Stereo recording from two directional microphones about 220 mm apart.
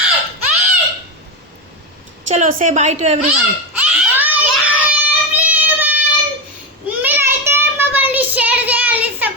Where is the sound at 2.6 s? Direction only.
30° right (ahead or behind).